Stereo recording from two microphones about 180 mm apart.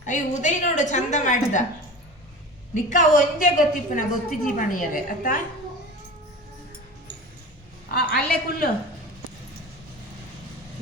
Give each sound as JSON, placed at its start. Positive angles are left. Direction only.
{"t": 0.0, "sound": "a woman's voice", "side_deg": 45}
{"t": 2.9, "sound": "a woman's voice", "side_deg": 45}
{"t": 7.9, "sound": "a woman's voice", "side_deg": 55}